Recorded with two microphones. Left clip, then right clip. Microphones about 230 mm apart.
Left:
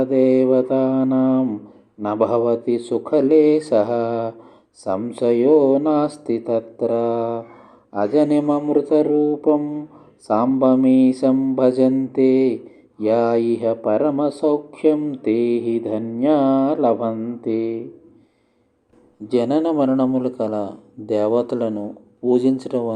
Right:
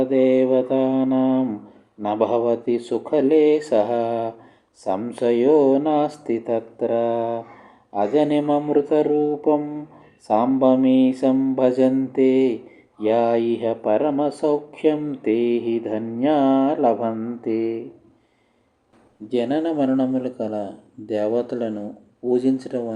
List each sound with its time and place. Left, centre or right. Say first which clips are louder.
0.0 s speech: left 1 dB; centre
19.3 s speech: left 3 dB; left
19.6 s speech: left 3 dB; centre